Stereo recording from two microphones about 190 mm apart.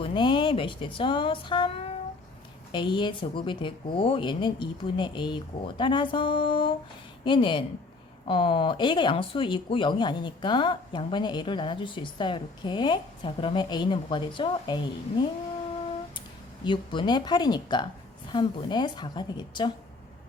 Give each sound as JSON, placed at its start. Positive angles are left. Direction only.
{"t": 0.0, "sound": "speech", "side_deg": 25}
{"t": 16.6, "sound": "speech", "side_deg": 25}